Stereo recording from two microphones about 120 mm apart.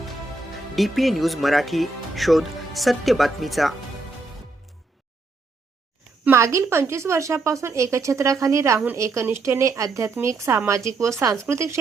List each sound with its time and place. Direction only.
0.8 s speech: centre (ahead or behind)
6.2 s a woman's voice: 25° right (ahead or behind)